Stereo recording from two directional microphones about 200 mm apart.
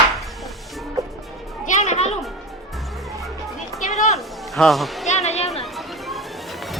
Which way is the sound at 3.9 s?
35° left (ahead or behind).